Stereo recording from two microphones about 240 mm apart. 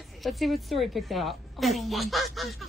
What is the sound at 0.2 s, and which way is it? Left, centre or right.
A child's voice, centre.